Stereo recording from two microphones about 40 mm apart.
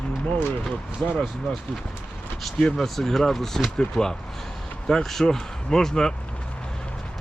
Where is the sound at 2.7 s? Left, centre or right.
Centre.